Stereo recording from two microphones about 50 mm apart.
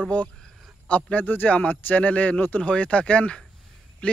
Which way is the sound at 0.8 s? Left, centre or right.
Left.